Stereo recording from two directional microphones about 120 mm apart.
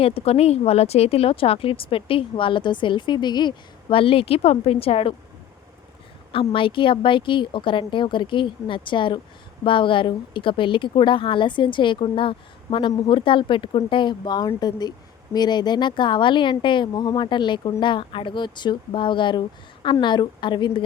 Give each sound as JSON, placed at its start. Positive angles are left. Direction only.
{"t": 0.0, "sound": "speech", "side_deg": 55}
{"t": 6.5, "sound": "speech", "side_deg": 45}